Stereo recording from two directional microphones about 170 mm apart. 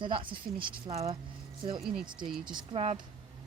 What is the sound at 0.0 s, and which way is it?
Speech, 30° right (ahead or behind).